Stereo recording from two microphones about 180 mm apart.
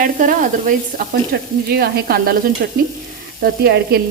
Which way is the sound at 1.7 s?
55° right (ahead or behind).